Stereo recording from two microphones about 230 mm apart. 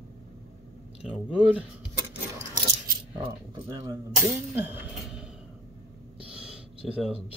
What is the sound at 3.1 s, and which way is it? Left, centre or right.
Speech, right.